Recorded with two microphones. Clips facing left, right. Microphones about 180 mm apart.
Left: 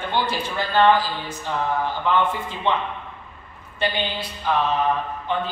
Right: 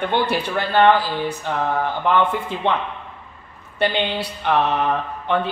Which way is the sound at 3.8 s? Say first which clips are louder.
Right 4 dB; 65° right (ahead or behind).